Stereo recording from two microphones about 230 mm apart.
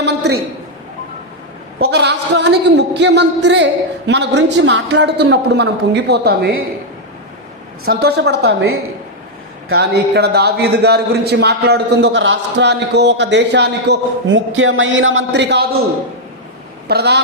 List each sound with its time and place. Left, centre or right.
0.0 s a sound: right
1.8 s a man's voice: right
7.9 s a man's voice: right
9.7 s a man's voice: right
16.9 s a man's voice: right